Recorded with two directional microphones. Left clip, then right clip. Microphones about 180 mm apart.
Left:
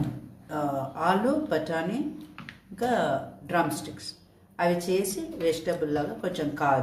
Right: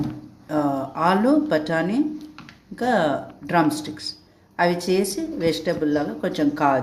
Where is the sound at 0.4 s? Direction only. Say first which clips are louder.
Right 6 dB; 45° right (ahead or behind).